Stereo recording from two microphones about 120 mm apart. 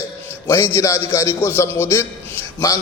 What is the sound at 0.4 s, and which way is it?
A man's voice, 20° left (ahead or behind).